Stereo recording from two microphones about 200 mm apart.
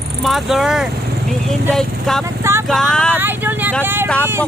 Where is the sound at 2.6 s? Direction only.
Centre (ahead or behind).